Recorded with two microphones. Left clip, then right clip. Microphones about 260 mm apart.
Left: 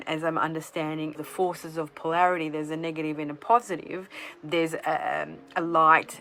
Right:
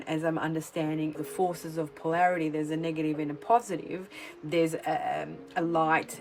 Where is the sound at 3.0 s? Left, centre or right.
Centre.